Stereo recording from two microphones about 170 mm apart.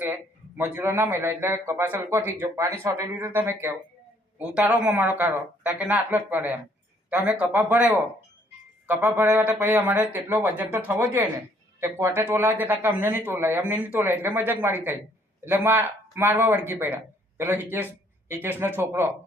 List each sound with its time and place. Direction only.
0.0 s speech: 10° right (ahead or behind)